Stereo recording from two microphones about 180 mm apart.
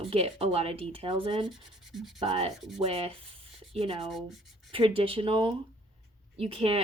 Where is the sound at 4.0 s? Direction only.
Centre (ahead or behind).